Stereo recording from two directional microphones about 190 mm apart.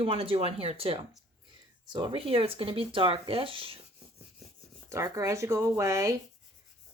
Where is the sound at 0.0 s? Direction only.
30° right (ahead or behind).